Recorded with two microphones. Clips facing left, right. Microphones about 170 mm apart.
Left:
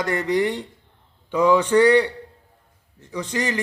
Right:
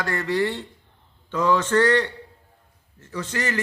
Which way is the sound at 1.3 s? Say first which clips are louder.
Left 4 dB; 15° left (ahead or behind).